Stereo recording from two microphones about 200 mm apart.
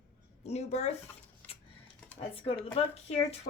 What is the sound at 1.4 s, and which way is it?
Typewriter, 10° left (ahead or behind).